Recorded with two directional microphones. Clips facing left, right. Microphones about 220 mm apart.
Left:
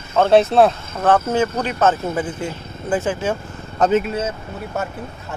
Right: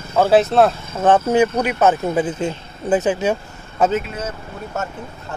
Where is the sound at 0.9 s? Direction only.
20° right (ahead or behind).